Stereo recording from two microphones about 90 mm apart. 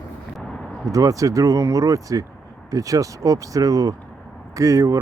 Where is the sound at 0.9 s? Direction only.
40° right (ahead or behind).